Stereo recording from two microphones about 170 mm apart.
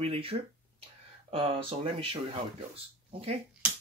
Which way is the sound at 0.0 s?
35° right (ahead or behind).